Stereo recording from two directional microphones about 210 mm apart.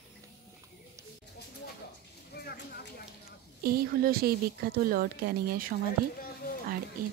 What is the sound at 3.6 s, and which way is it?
A woman's voice, 45° right (ahead or behind).